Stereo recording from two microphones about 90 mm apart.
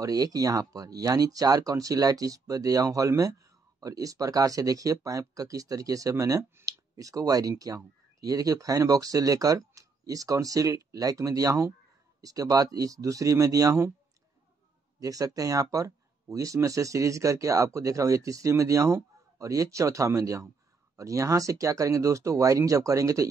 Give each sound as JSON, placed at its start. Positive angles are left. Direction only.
{"t": 0.0, "sound": "speech", "side_deg": -45}
{"t": 15.0, "sound": "speech", "side_deg": -40}